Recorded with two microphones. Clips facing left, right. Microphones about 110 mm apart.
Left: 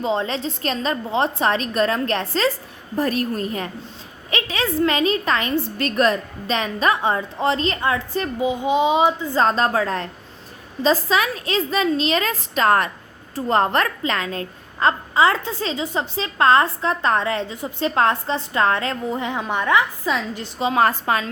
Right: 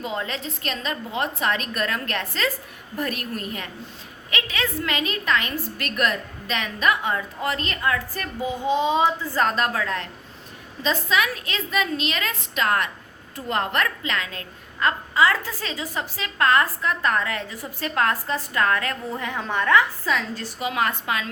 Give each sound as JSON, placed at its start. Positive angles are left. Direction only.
{"t": 0.0, "sound": "a woman's voice", "side_deg": 30}